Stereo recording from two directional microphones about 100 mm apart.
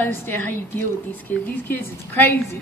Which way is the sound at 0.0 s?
20° left (ahead or behind).